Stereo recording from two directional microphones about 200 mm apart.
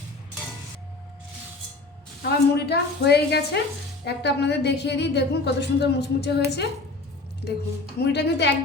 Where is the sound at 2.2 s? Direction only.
55° left (ahead or behind).